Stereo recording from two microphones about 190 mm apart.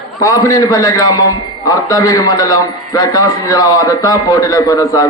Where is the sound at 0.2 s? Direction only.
15° left (ahead or behind).